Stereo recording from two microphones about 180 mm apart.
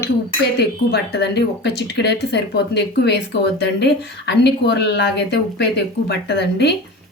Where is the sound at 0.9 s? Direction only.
65° left (ahead or behind).